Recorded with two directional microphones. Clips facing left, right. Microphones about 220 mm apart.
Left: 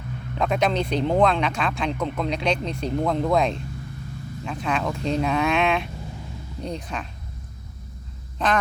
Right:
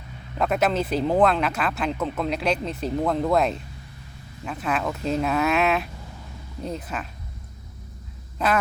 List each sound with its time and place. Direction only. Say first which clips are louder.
0.3 s speech: even; 5° right (ahead or behind)
8.4 s quack: even; 10° right (ahead or behind)